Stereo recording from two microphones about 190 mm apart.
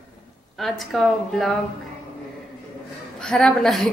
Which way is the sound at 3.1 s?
5° left (ahead or behind).